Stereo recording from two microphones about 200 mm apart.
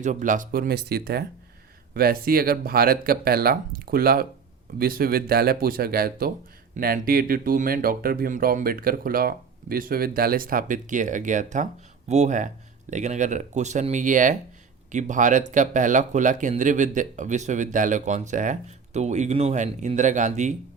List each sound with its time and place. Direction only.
0.0 s speech: 40° right (ahead or behind)